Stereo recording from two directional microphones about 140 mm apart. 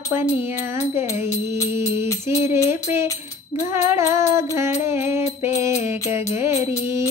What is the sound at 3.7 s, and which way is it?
Music, 20° right (ahead or behind).